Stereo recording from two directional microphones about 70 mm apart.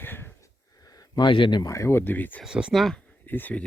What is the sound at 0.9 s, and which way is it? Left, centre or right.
Speech, left.